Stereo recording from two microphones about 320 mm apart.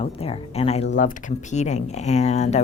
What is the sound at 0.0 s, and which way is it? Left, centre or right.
Speech, centre.